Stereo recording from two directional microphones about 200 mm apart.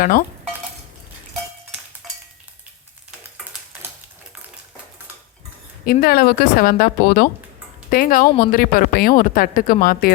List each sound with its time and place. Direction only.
0.0 s a woman's voice: 45° left (ahead or behind)
2.0 s stir: centre (ahead or behind)
5.8 s a woman's voice: 50° left (ahead or behind)